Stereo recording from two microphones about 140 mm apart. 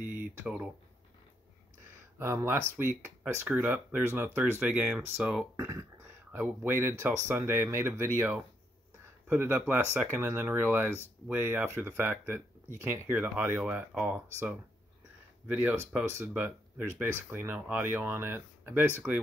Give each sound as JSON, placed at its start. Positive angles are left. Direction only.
{"t": 0.0, "sound": "speech", "side_deg": -10}
{"t": 2.1, "sound": "speech", "side_deg": -15}
{"t": 5.6, "sound": "speech", "side_deg": -20}